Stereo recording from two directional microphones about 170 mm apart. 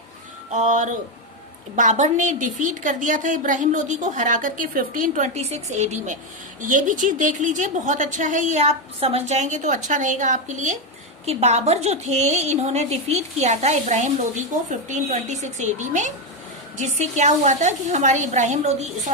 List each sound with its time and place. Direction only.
0.5 s a woman's voice: 45° right (ahead or behind)